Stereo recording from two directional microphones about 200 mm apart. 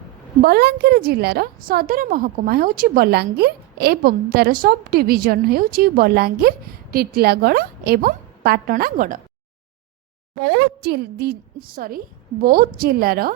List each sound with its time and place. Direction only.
0.4 s a woman's voice: 50° right (ahead or behind)
10.5 s a woman's voice: 55° right (ahead or behind)